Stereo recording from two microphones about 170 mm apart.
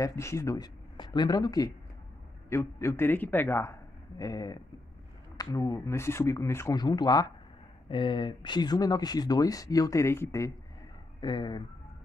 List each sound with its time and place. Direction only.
0.0 s a man's voice: 15° left (ahead or behind)
11.1 s speech: 25° left (ahead or behind)